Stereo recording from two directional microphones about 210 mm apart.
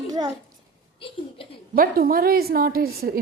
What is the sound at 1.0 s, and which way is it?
Speech, 25° left (ahead or behind).